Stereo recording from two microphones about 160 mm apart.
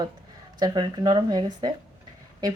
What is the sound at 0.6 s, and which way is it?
Speech, 25° right (ahead or behind).